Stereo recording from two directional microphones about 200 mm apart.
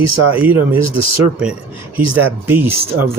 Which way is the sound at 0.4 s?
10° right (ahead or behind).